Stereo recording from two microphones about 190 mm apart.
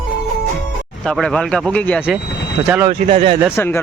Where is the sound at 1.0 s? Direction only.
Centre (ahead or behind).